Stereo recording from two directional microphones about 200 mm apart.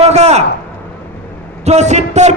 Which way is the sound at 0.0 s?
35° right (ahead or behind).